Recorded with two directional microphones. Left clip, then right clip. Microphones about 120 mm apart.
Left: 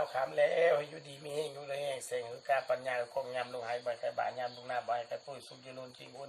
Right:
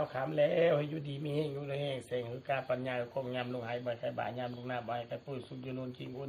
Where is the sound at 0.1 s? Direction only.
20° left (ahead or behind).